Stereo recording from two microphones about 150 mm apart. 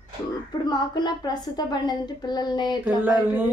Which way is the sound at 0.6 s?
30° left (ahead or behind).